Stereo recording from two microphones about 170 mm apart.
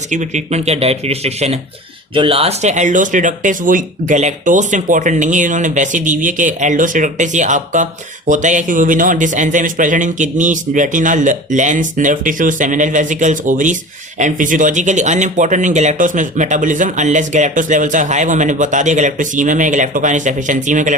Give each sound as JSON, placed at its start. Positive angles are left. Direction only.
{"t": 0.1, "sound": "speech", "side_deg": -45}